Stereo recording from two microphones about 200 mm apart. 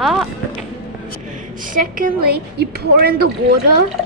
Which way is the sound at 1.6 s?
45° right (ahead or behind).